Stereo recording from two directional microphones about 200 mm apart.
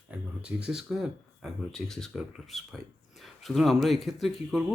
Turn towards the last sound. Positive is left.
turn(degrees=0)  # may be behind; listen again after turning